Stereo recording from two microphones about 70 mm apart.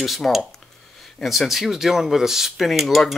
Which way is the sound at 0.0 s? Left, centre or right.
Centre.